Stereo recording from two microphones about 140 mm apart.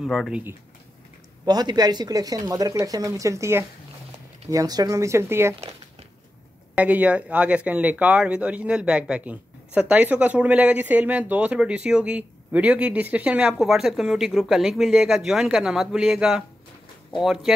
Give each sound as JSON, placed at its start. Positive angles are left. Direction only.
{"t": 0.0, "sound": "speech", "side_deg": 0}
{"t": 1.4, "sound": "speech", "side_deg": -30}
{"t": 6.8, "sound": "speech", "side_deg": -10}